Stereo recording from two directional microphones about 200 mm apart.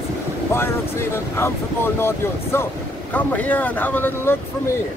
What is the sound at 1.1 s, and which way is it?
Speech, 10° left (ahead or behind).